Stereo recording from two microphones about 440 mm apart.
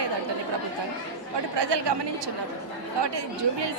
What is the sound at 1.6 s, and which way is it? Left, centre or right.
Speech, right.